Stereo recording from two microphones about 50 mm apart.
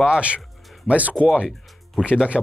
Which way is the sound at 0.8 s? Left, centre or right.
Right.